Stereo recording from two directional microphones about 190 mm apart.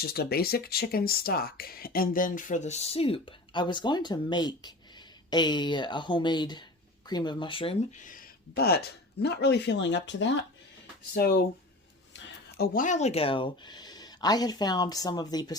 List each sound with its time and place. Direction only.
0.0 s speech: 55° left (ahead or behind); by 7.8 s 25° left (ahead or behind)
8.0 s speech: 45° left (ahead or behind); by 10.3 s 65° left (ahead or behind)
11.1 s speech: 55° left (ahead or behind); by 15.5 s 20° left (ahead or behind)